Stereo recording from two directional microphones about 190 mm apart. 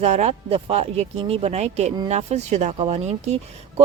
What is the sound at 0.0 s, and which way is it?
Speech, 35° right (ahead or behind).